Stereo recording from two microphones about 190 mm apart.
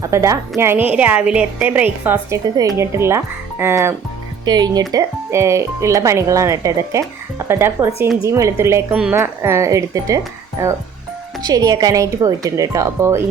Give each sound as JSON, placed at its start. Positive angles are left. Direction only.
{"t": 0.0, "sound": "a woman's voice", "side_deg": -15}